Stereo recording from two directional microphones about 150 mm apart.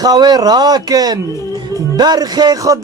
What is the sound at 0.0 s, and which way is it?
Speech, 25° right (ahead or behind).